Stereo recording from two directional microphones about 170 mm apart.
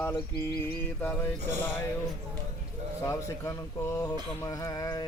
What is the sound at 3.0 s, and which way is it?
Speech, 15° left (ahead or behind).